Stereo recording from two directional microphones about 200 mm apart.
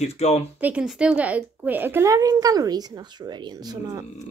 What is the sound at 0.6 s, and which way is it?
Speech, 5° right (ahead or behind).